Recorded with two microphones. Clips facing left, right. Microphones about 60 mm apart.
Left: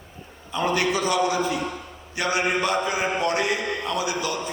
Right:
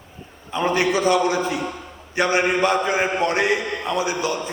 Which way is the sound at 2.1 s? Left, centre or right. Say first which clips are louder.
Right 4 dB; right.